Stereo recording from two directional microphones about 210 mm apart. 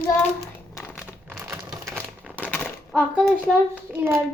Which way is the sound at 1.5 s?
15° right (ahead or behind).